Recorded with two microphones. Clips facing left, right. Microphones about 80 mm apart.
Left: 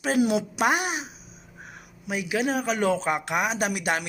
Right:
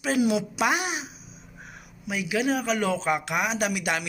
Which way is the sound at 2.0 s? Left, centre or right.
Left.